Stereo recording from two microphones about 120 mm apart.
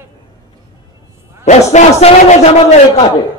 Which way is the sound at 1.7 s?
70° left (ahead or behind).